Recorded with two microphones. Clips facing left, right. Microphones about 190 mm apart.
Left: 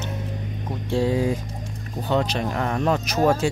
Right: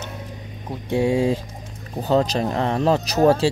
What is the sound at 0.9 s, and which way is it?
Speech, 25° right (ahead or behind).